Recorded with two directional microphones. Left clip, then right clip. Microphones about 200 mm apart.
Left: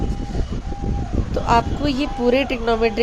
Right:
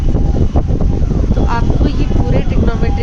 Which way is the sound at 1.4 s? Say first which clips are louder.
Left 4 dB; 25° left (ahead or behind).